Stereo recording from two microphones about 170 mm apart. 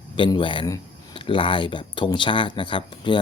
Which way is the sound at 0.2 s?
30° left (ahead or behind).